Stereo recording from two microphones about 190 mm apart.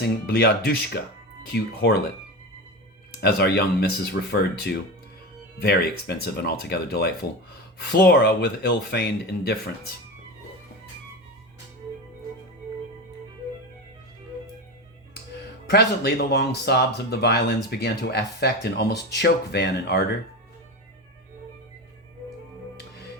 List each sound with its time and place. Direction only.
0.0 s speech: 60° left (ahead or behind)
3.2 s speech: 60° left (ahead or behind)
15.7 s speech: 60° left (ahead or behind)